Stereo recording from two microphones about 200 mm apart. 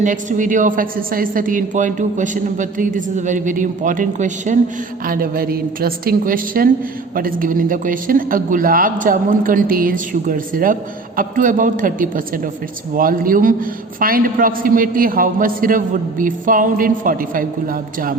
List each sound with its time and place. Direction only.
0.0 s a woman's voice: 40° right (ahead or behind)